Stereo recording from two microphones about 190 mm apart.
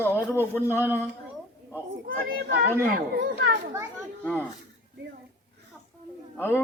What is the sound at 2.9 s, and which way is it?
Speech, 50° right (ahead or behind).